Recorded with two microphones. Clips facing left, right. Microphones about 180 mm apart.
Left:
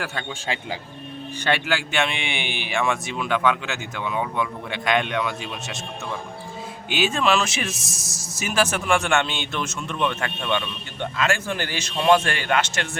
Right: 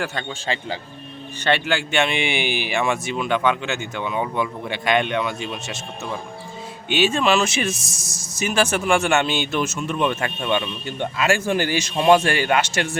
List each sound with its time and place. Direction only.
0.0 s a man's voice: 10° left (ahead or behind)
6.9 s a man's voice: centre (ahead or behind)